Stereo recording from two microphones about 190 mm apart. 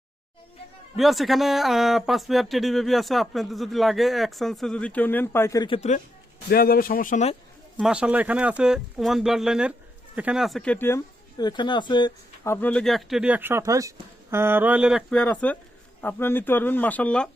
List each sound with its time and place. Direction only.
0.9 s speech: centre (ahead or behind); by 5.9 s 25° left (ahead or behind)
6.5 s speech: 50° left (ahead or behind)
7.8 s speech: 5° right (ahead or behind); by 12.1 s 25° left (ahead or behind)
12.5 s speech: 10° left (ahead or behind)